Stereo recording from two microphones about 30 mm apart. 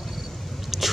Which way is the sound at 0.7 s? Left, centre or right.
Centre.